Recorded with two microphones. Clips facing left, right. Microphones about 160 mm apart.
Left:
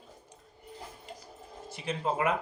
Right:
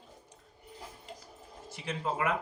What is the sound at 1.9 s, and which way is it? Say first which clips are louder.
Speech: left 3 dB; 25° left (ahead or behind).